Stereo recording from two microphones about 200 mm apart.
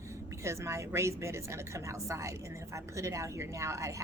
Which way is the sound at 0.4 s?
15° right (ahead or behind).